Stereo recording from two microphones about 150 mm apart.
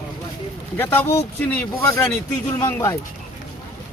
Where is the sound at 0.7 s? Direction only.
15° left (ahead or behind).